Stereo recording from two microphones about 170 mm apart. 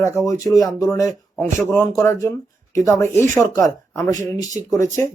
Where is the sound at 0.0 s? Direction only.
15° left (ahead or behind).